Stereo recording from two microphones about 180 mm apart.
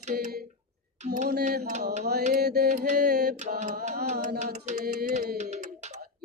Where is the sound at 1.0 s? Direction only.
40° right (ahead or behind).